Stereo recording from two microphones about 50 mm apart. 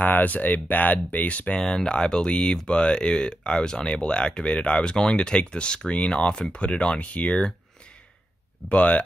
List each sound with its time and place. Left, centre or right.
0.0 s speech: left
1.5 s speech: centre
8.6 s speech: left